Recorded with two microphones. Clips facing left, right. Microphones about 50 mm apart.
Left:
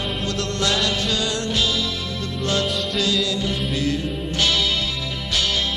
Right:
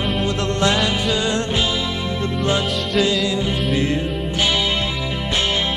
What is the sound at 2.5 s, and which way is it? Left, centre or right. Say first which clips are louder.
Music: even; centre.